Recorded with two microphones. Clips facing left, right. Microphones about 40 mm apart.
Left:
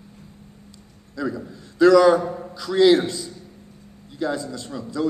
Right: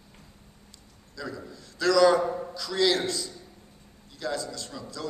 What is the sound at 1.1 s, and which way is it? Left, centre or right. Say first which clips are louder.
A man's voice: left 9 dB; left.